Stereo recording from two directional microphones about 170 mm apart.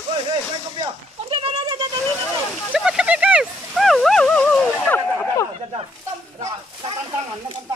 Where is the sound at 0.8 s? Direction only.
30° right (ahead or behind).